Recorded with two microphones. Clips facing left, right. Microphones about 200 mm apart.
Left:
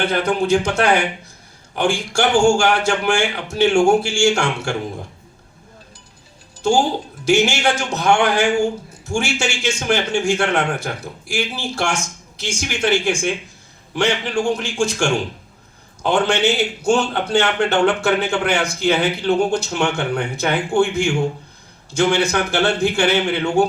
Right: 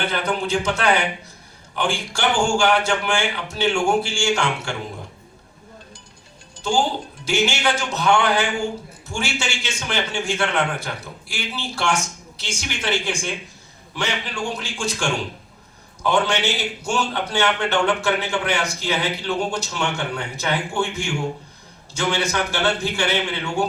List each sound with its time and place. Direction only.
0.0 s a man's voice: 45° left (ahead or behind)
6.6 s a man's voice: 45° left (ahead or behind)
21.9 s a man's voice: 50° left (ahead or behind)